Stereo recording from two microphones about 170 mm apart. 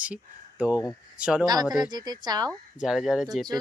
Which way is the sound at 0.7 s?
20° left (ahead or behind).